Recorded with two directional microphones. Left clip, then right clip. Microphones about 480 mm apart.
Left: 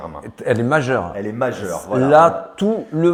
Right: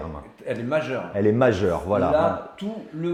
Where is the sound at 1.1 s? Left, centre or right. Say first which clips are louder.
Right 2 dB; right.